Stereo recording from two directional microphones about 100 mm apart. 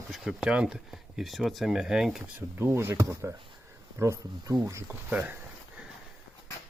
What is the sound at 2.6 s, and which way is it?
Speech, 25° right (ahead or behind).